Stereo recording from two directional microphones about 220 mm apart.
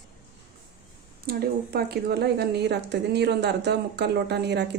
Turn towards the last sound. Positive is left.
turn(degrees=-50)  # may be behind; listen again after turning